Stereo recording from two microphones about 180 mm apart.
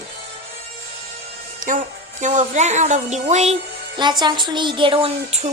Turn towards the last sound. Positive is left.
turn(degrees=-35)  # may be behind; listen again after turning